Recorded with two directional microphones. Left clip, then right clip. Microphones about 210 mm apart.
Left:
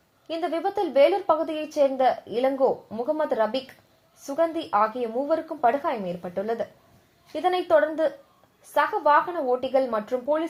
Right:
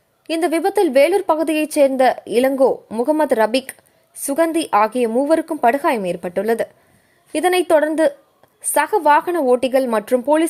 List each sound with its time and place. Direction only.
0.3 s a woman's voice: 45° right (ahead or behind)